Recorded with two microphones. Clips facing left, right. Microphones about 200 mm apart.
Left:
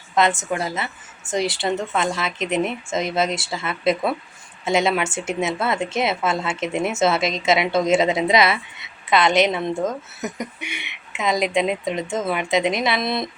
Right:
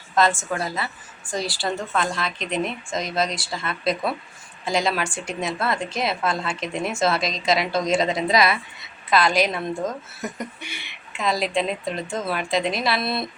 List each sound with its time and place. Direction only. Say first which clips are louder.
0.5 s a woman's voice: left 2 dB; 20° left (ahead or behind)